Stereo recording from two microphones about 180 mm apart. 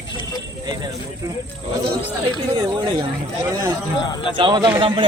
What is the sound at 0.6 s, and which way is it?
Speech, 20° right (ahead or behind).